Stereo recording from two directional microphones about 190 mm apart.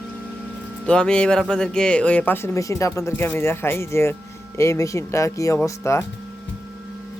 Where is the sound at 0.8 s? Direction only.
5° left (ahead or behind).